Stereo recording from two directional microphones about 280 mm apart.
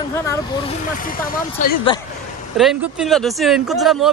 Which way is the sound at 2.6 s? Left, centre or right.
Centre.